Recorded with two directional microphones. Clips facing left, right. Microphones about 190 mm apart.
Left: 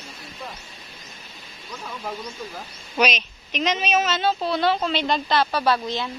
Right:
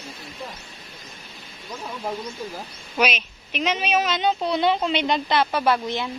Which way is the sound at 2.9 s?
10° right (ahead or behind).